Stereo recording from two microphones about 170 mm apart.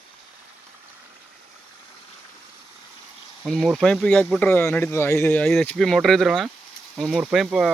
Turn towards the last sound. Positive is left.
turn(degrees=-5)  # may be behind; listen again after turning